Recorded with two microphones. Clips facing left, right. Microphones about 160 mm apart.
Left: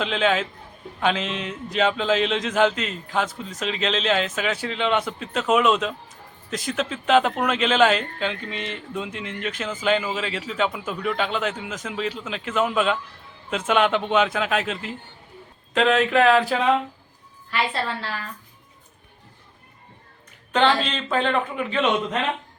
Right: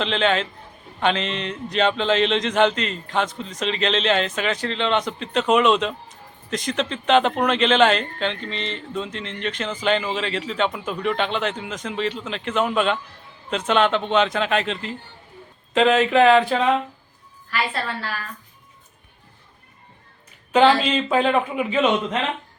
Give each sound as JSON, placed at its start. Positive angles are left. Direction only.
{"t": 0.0, "sound": "a man's voice", "side_deg": 5}
{"t": 17.5, "sound": "a woman's voice", "side_deg": 25}
{"t": 20.5, "sound": "a man's voice", "side_deg": -10}